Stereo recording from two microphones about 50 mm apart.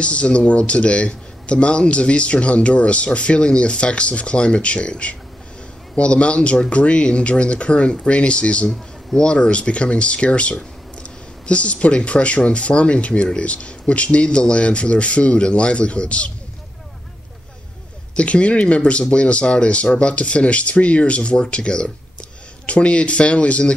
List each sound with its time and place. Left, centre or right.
0.0 s speech: left
18.1 s speech: left